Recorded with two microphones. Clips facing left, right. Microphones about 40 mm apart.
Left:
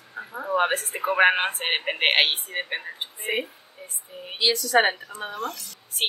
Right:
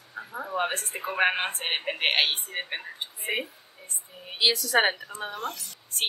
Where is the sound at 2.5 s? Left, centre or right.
Centre.